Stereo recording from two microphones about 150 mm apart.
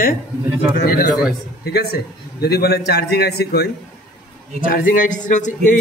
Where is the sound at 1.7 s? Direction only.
90° left.